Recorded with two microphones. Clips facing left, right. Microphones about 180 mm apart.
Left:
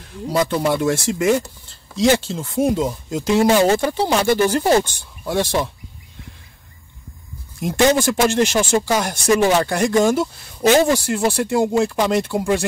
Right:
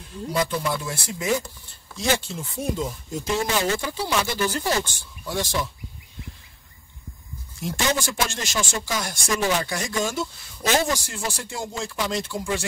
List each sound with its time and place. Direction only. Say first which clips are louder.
0.3 s speech: left 7 dB; 70° left (ahead or behind)
7.6 s speech: left 10 dB; 60° left (ahead or behind)